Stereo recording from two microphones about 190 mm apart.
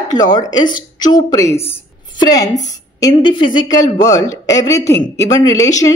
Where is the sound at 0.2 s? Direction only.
20° left (ahead or behind).